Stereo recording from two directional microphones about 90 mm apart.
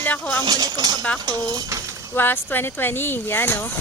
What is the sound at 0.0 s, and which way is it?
Speech, 20° left (ahead or behind).